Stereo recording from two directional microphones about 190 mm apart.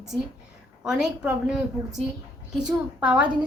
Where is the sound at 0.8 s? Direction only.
5° right (ahead or behind).